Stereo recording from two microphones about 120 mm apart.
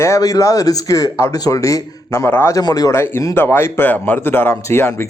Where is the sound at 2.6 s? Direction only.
30° left (ahead or behind).